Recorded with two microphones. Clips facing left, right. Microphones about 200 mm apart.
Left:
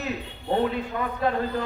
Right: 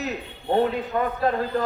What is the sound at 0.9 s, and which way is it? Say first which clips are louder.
Speech: right 5 dB; 45° right (ahead or behind).